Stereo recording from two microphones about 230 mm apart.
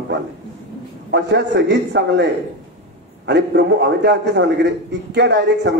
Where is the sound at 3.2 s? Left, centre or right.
Right.